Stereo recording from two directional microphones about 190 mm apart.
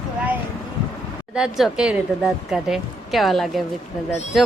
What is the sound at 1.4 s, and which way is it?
Speech, centre (ahead or behind).